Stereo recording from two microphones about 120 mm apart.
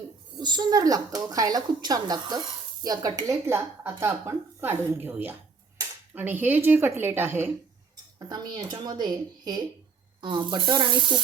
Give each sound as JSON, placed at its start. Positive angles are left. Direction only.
{"t": 0.3, "sound": "a woman's voice", "side_deg": -35}
{"t": 8.3, "sound": "speech", "side_deg": -35}